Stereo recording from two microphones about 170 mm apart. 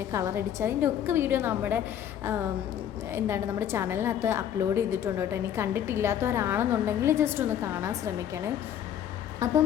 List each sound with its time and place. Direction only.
0.1 s a woman's voice: 15° right (ahead or behind)
9.4 s music: 20° right (ahead or behind)